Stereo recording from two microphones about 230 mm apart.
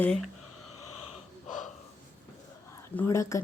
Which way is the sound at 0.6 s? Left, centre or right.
Left.